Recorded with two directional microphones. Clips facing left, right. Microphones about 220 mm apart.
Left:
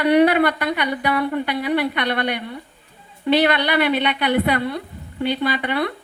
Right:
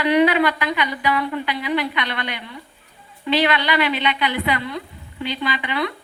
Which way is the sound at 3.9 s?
55° left (ahead or behind).